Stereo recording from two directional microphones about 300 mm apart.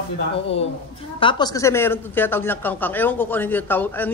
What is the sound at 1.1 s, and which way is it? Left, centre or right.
Speech, centre.